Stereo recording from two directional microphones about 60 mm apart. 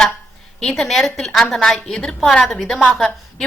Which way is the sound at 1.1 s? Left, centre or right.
Centre.